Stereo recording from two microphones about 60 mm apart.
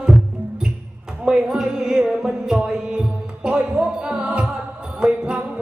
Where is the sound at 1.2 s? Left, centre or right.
Centre.